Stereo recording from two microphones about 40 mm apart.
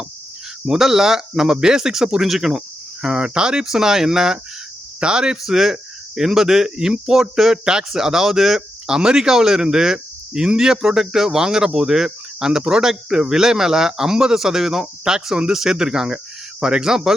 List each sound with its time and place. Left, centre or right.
0.6 s speech: centre
3.2 s speech: right
4.9 s speech: right; by 7.6 s centre
7.6 s speech: centre